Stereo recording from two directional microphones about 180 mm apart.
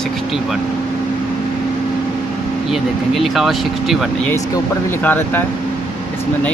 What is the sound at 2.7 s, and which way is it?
Speech, centre (ahead or behind).